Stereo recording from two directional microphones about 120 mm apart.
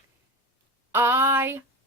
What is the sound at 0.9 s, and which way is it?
Speech, 20° right (ahead or behind).